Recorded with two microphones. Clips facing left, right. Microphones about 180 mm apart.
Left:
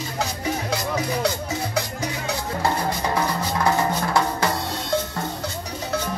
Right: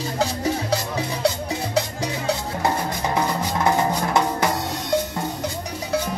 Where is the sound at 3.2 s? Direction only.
20° right (ahead or behind).